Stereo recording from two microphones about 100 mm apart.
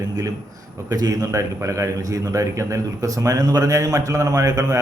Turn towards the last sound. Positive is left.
turn(degrees=-35)  # may be behind; listen again after turning